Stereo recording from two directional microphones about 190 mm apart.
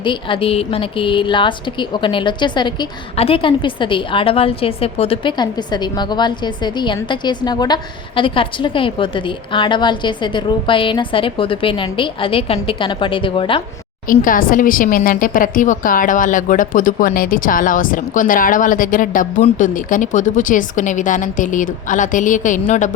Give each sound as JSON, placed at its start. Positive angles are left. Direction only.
{"t": 0.0, "sound": "a woman's voice", "side_deg": 25}
{"t": 14.1, "sound": "a woman's voice", "side_deg": 45}